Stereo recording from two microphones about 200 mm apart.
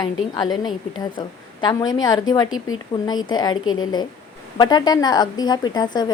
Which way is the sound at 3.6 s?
90° left.